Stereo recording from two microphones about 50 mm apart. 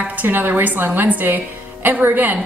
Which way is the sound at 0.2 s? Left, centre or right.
Right.